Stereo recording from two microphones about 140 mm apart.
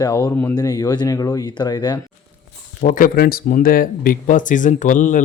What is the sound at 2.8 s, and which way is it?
Speech, 75° left (ahead or behind).